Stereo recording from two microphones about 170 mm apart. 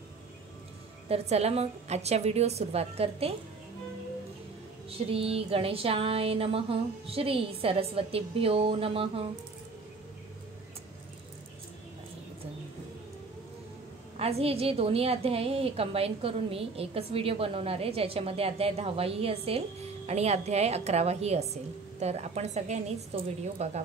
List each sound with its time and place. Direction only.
1.0 s a woman's voice: 35° right (ahead or behind)
4.8 s a woman's voice: 35° right (ahead or behind)
14.1 s a woman's voice: 35° right (ahead or behind)